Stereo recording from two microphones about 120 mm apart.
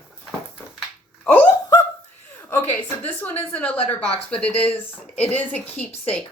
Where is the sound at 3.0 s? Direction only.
15° left (ahead or behind).